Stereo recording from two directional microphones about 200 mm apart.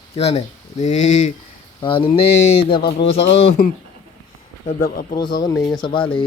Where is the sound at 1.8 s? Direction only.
25° left (ahead or behind).